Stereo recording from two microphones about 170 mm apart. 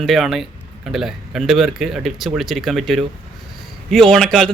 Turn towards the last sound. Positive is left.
turn(degrees=0)  # may be behind; listen again after turning